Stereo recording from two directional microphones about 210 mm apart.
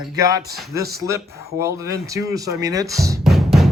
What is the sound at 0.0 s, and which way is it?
Speech, 15° right (ahead or behind).